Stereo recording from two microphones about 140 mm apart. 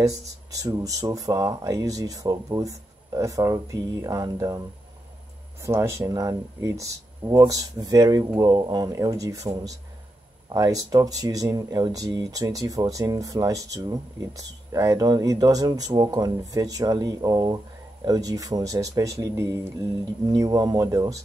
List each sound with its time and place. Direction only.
0.0 s speech: 25° right (ahead or behind)